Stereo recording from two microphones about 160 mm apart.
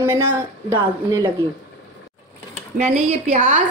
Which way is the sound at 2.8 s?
45° right (ahead or behind).